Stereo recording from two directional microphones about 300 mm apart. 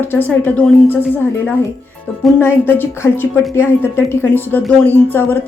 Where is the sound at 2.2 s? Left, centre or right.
Centre.